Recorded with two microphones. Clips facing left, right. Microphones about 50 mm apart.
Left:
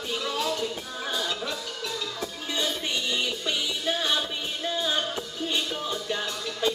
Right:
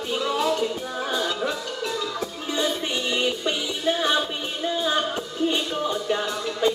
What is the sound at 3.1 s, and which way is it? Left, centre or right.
Music, centre.